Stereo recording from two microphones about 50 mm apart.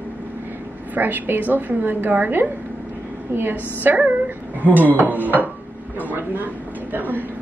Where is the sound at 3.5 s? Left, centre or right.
Right.